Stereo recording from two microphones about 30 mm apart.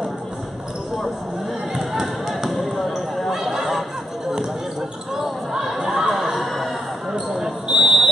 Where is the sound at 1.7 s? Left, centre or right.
Centre.